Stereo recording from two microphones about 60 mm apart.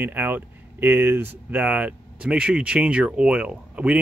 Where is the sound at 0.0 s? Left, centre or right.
Right.